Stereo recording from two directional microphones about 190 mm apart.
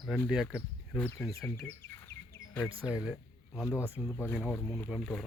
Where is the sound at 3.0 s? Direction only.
Centre (ahead or behind).